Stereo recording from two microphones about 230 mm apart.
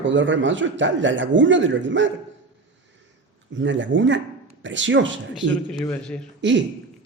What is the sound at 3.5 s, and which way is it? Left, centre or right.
A man's voice, right.